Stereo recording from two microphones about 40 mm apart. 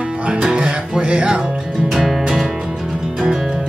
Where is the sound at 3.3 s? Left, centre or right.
Centre.